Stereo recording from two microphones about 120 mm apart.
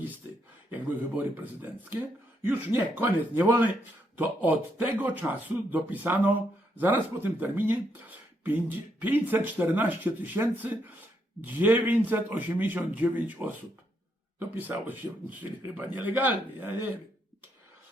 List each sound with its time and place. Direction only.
0.7 s speech: 15° right (ahead or behind)